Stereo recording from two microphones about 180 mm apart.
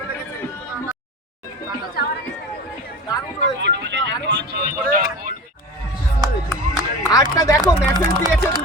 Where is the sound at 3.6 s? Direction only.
75° right (ahead or behind); by 5.3 s 50° right (ahead or behind).